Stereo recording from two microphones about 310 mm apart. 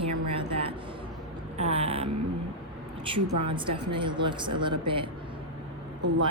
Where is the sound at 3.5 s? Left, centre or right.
Centre.